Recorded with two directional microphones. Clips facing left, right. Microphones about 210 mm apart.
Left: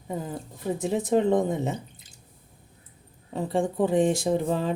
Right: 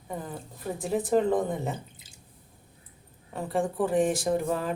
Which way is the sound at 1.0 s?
20° left (ahead or behind).